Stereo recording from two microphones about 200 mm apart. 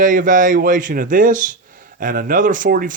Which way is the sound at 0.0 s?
40° right (ahead or behind).